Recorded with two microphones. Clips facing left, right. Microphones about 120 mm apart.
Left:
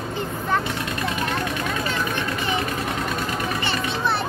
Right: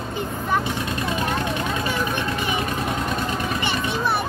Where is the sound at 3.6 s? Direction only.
15° right (ahead or behind).